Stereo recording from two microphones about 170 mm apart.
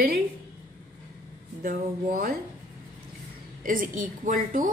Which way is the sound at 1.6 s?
55° right (ahead or behind).